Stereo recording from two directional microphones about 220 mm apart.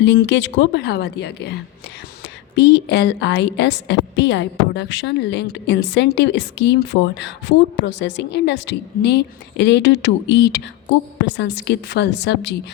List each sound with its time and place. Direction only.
0.0 s a woman's voice: 50° left (ahead or behind)
2.6 s a woman's voice: 50° left (ahead or behind)